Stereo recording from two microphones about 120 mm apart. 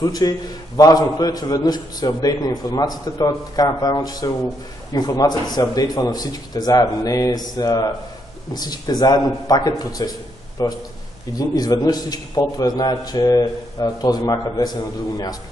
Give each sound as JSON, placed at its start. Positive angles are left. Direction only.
{"t": 0.0, "sound": "a man's voice", "side_deg": 30}